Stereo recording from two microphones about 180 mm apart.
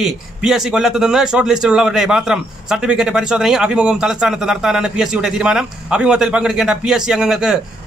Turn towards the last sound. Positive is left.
turn(degrees=-5)  # may be behind; listen again after turning